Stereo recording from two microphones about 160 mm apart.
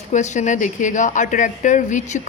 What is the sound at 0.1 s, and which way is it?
Speech, 50° left (ahead or behind).